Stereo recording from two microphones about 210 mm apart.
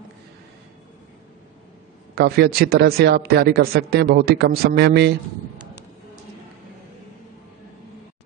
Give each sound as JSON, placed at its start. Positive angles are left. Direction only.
{"t": 2.1, "sound": "speech", "side_deg": -50}